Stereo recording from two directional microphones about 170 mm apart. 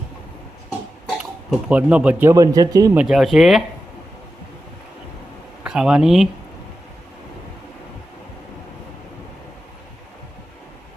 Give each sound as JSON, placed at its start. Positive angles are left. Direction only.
{"t": 1.2, "sound": "speech", "side_deg": -5}
{"t": 2.9, "sound": "speech", "side_deg": -5}
{"t": 5.6, "sound": "speech", "side_deg": -5}